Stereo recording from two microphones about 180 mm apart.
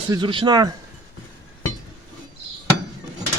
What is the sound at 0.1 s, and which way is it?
Speech, 25° right (ahead or behind).